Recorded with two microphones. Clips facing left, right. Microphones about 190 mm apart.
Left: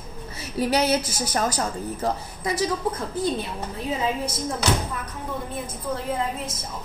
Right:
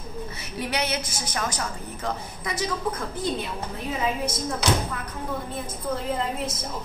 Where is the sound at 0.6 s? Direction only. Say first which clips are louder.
Left 7 dB; 35° left (ahead or behind).